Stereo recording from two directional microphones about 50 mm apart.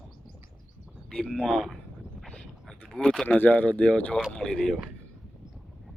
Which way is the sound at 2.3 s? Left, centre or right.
Centre.